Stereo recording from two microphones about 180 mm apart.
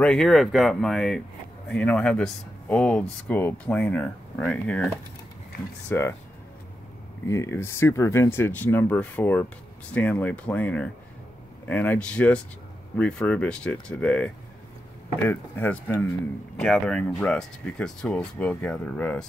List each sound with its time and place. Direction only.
0.0 s speech: 5° left (ahead or behind)
5.9 s speech: 10° left (ahead or behind)
7.2 s speech: 15° left (ahead or behind)